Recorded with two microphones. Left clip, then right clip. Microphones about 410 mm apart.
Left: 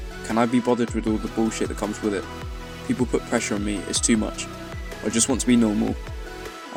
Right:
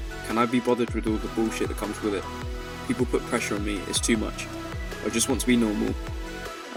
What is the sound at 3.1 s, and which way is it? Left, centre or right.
Speech, right.